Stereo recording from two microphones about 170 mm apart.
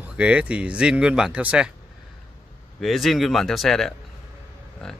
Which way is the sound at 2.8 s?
Centre (ahead or behind).